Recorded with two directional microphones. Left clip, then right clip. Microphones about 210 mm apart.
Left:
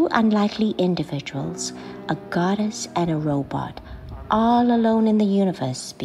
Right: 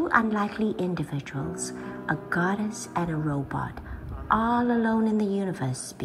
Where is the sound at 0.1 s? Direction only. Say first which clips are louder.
Left 3 dB; 20° left (ahead or behind).